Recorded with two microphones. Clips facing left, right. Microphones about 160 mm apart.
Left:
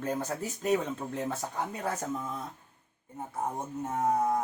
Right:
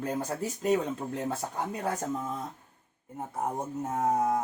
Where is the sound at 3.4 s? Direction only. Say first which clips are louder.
Right 2 dB; 10° right (ahead or behind).